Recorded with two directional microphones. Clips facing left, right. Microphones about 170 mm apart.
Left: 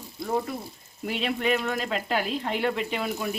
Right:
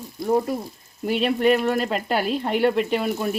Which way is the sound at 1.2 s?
45° right (ahead or behind).